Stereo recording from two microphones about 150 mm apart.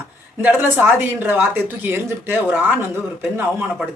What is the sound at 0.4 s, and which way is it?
Speech, 10° right (ahead or behind).